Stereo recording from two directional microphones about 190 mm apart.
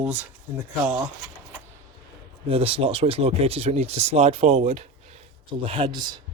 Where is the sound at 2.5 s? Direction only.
30° right (ahead or behind).